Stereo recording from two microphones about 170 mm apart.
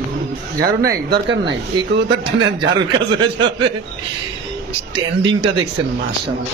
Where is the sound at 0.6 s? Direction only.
65° right (ahead or behind).